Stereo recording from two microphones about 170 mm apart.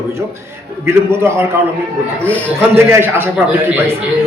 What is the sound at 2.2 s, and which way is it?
Speech, 10° left (ahead or behind).